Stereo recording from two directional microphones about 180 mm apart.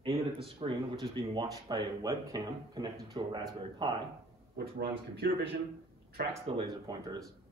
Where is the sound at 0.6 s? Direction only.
25° right (ahead or behind).